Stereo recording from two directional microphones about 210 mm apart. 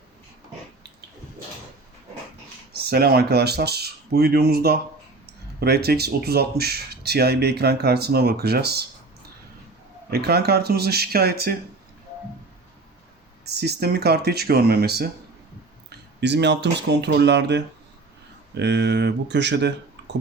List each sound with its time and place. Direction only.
2.7 s speech: 50° right (ahead or behind)
10.1 s speech: 50° right (ahead or behind)
13.6 s speech: 50° right (ahead or behind)
20.0 s a sound: 55° right (ahead or behind)